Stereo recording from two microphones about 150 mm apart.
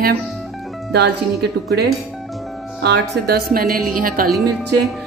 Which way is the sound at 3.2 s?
85° right.